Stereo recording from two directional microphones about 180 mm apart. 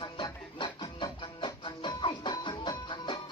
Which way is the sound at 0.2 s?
25° left (ahead or behind).